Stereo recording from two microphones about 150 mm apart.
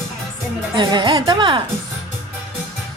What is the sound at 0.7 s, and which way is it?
Speech, 30° right (ahead or behind).